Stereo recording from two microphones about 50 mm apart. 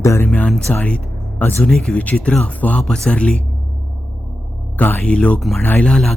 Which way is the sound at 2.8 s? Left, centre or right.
Centre.